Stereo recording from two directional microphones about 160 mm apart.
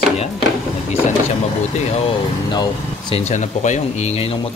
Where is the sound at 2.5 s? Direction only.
25° left (ahead or behind).